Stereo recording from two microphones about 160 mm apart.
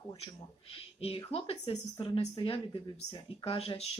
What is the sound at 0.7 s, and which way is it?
Speech, 35° left (ahead or behind).